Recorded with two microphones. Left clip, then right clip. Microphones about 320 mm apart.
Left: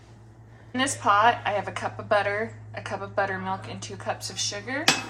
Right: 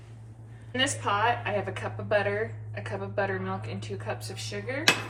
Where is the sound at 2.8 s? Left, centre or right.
Left.